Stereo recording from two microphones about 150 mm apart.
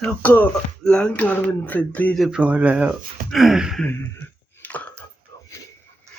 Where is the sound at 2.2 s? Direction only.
5° right (ahead or behind).